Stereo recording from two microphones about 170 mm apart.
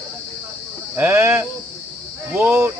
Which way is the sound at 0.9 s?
15° right (ahead or behind).